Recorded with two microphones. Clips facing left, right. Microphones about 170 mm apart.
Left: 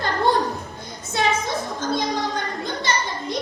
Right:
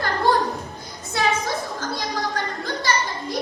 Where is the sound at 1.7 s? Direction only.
20° left (ahead or behind).